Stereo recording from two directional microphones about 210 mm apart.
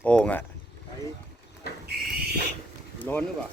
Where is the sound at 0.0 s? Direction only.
5° left (ahead or behind).